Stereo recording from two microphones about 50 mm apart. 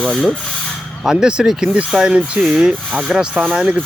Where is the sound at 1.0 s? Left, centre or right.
Centre.